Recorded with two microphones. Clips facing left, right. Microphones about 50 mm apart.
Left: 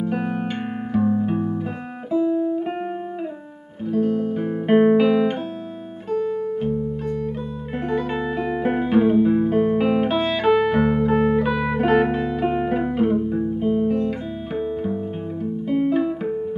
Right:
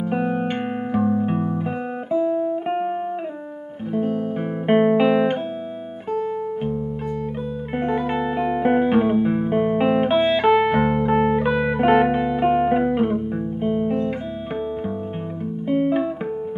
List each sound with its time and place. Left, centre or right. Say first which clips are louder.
0.0 s music: right 2 dB; centre
3.9 s music: left 2 dB; centre
6.1 s music: left 2 dB; centre
15.7 s music: even; centre